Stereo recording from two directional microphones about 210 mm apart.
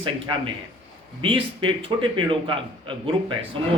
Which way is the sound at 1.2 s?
25° right (ahead or behind).